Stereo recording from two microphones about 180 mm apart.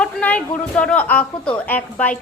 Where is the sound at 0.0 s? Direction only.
5° left (ahead or behind).